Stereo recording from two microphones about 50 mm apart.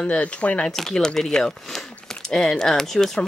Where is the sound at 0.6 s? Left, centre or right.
Centre.